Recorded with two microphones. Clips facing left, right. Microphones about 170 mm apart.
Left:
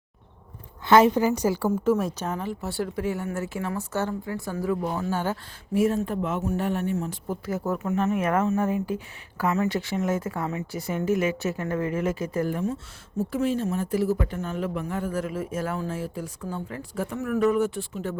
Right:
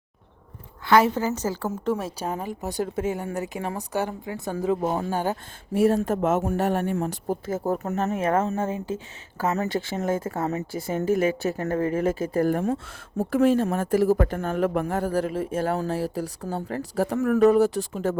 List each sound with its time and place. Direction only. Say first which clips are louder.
0.9 s a woman's voice: left 2 dB; 20° left (ahead or behind); by 2.1 s centre (ahead or behind)
2.4 s a woman's voice: right 1 dB; 15° right (ahead or behind)
4.8 s speech: right 3 dB; 35° right (ahead or behind)
5.1 s speech: right 2 dB; 15° right (ahead or behind)
6.1 s speech: right 4 dB; 45° right (ahead or behind)
7.4 s speech: even; 25° right (ahead or behind)
9.5 s speech: left 1 dB; 35° right (ahead or behind)
10.4 s speech: right 3 dB; 40° right (ahead or behind)
10.8 s speech: right 1 dB; 30° right (ahead or behind)
12.6 s speech: right 3 dB; 55° right (ahead or behind)